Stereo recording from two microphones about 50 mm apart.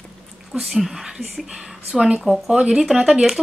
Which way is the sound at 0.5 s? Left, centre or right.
Centre.